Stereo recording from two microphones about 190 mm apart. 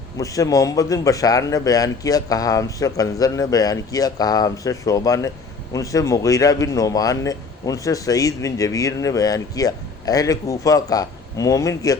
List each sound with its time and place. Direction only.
0.2 s a man's voice: 15° left (ahead or behind)